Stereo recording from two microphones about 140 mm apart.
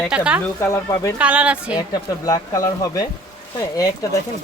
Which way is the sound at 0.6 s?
20° left (ahead or behind).